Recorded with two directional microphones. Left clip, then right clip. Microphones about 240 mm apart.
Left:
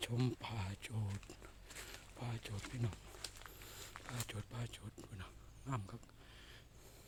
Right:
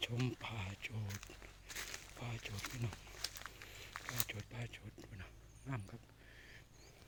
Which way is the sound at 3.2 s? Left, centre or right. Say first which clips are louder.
Right 8 dB; right.